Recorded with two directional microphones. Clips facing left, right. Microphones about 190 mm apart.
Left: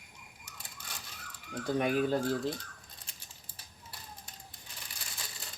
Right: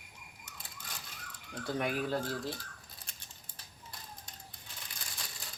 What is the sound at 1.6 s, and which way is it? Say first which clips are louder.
Speech: left 5 dB; 20° left (ahead or behind).